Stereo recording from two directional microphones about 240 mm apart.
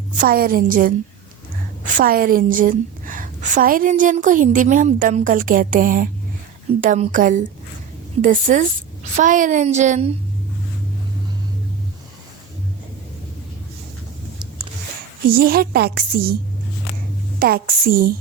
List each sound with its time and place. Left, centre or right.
0.2 s a woman's voice: right
15.3 s a woman's voice: right
17.4 s a woman's voice: right